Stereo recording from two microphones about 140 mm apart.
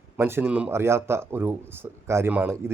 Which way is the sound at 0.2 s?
15° right (ahead or behind).